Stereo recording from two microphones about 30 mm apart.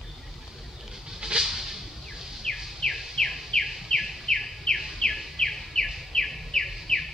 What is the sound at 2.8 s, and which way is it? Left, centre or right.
Chirp, centre.